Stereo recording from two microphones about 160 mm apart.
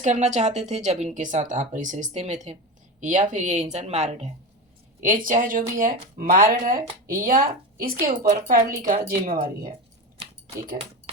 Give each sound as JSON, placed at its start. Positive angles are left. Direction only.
{"t": 0.0, "sound": "speech", "side_deg": -45}
{"t": 5.0, "sound": "speech", "side_deg": -55}
{"t": 8.2, "sound": "speech", "side_deg": -45}
{"t": 8.8, "sound": "speech", "side_deg": -60}